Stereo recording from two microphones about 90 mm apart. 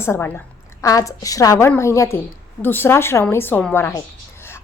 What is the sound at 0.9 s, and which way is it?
A woman's voice, 40° left (ahead or behind).